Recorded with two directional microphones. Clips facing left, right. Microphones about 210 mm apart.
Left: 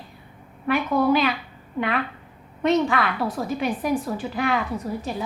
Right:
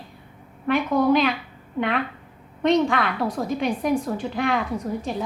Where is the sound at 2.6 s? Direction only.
5° left (ahead or behind).